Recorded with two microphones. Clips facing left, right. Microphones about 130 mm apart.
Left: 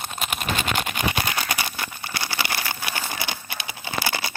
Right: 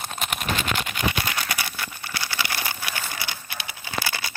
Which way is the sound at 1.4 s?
25° left (ahead or behind).